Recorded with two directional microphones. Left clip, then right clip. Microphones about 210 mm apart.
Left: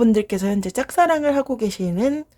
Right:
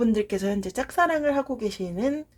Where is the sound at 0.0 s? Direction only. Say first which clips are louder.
Left 5 dB; 35° left (ahead or behind).